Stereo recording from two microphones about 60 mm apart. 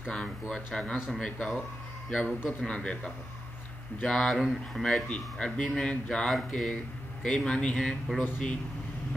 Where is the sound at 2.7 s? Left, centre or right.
Centre.